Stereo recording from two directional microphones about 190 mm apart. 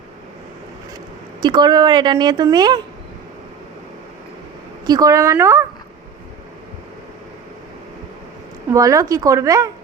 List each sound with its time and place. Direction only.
1.4 s speech: 25° right (ahead or behind)
4.9 s a woman's voice: 20° right (ahead or behind)
8.7 s a woman's voice: 15° right (ahead or behind)